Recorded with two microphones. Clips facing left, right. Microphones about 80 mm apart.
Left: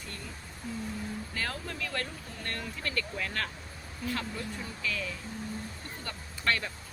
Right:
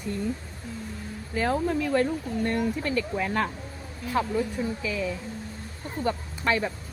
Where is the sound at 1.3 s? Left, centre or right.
Centre.